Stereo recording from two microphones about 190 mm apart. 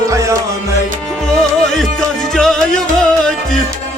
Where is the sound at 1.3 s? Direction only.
Centre (ahead or behind).